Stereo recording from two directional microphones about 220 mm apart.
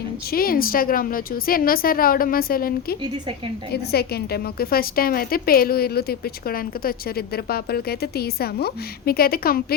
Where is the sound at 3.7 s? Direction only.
45° left (ahead or behind).